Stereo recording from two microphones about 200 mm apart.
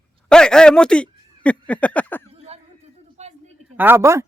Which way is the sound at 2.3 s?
30° right (ahead or behind).